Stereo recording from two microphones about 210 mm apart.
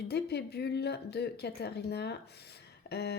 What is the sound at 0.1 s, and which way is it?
Speech, 50° left (ahead or behind).